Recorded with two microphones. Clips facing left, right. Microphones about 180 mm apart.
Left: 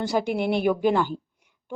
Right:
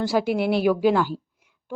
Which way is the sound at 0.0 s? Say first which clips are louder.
Right 2 dB; centre (ahead or behind).